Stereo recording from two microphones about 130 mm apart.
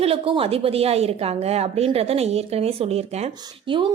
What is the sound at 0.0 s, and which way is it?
A woman's voice, 45° right (ahead or behind).